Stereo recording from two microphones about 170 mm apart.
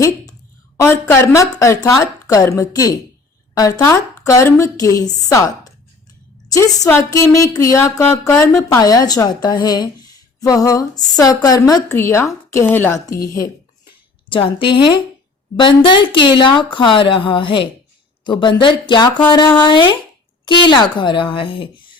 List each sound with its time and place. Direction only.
0.8 s speech: 15° left (ahead or behind)
14.3 s speech: 30° left (ahead or behind)